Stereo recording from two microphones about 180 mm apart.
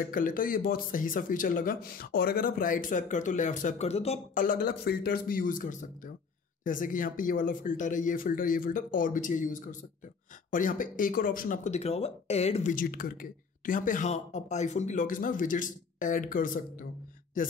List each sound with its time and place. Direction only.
0.0 s a man's voice: 50° left (ahead or behind)
4.5 s a man's voice: 55° left (ahead or behind); by 12.7 s 35° left (ahead or behind)
12.7 s a man's voice: 50° left (ahead or behind)